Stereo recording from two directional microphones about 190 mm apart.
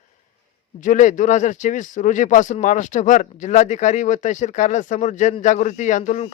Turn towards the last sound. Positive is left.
turn(degrees=35)  # may be behind; listen again after turning